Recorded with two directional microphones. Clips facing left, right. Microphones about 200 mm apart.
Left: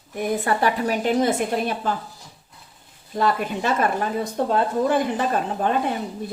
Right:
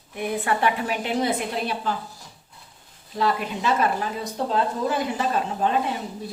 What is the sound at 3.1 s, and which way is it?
Speech, 50° left (ahead or behind).